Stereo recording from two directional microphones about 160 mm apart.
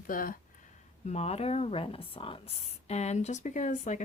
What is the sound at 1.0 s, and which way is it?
Speech, 40° left (ahead or behind).